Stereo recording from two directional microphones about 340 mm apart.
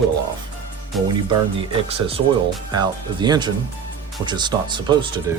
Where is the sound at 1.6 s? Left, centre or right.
Centre.